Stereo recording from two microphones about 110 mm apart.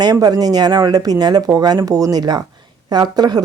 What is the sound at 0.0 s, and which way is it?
Speech, 35° right (ahead or behind).